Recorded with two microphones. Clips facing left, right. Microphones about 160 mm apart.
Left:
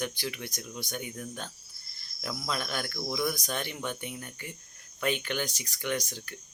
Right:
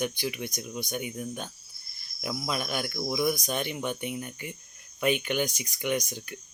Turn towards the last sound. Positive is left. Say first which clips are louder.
# right 3 dB
turn(degrees=-15)  # may be behind; listen again after turning